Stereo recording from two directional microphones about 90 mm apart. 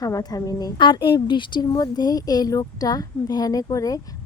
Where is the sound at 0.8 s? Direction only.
60° left (ahead or behind).